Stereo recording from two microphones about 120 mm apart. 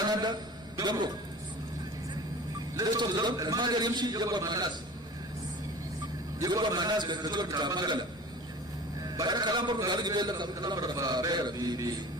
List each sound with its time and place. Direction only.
0.8 s a man's voice: 35° right (ahead or behind)
2.7 s a man's voice: 35° right (ahead or behind)
6.4 s a man's voice: 35° right (ahead or behind)
9.1 s a man's voice: 35° right (ahead or behind)